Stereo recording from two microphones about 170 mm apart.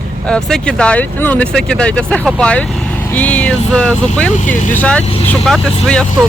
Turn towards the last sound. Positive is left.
turn(degrees=5)  # may be behind; listen again after turning